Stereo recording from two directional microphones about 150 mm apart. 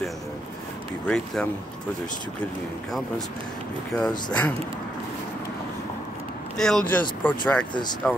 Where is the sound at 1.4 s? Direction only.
5° left (ahead or behind).